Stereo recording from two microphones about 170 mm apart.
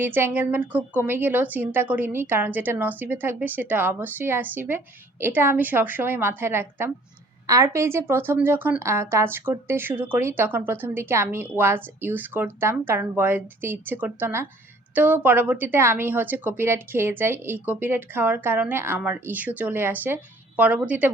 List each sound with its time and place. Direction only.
0.0 s a woman's voice: 10° right (ahead or behind)